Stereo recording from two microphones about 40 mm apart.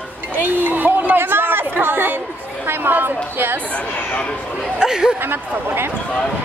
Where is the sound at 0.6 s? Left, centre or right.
Right.